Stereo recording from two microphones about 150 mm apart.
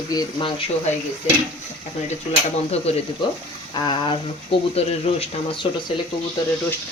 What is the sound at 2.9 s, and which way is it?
Speech, 45° left (ahead or behind).